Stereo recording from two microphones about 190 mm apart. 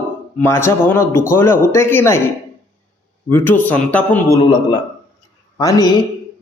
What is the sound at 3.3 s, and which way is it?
A man's voice, 10° left (ahead or behind).